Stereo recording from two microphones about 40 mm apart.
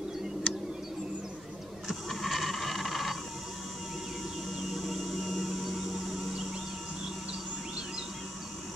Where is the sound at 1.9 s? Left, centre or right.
Centre.